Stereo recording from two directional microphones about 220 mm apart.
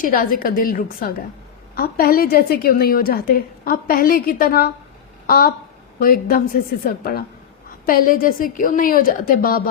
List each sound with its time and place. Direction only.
0.0 s a woman's voice: 40° left (ahead or behind)
5.2 s a sound: 40° left (ahead or behind)
6.0 s a woman's voice: 40° left (ahead or behind)